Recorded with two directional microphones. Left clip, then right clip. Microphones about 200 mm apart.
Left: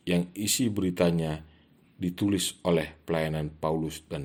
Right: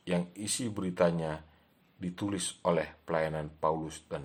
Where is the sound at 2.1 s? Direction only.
35° left (ahead or behind).